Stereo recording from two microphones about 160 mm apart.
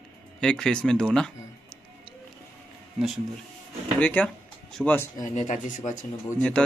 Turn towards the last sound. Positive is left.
turn(degrees=5)  # may be behind; listen again after turning